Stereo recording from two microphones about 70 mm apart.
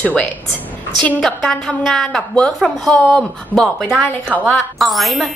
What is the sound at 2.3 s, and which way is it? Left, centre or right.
Speech, centre.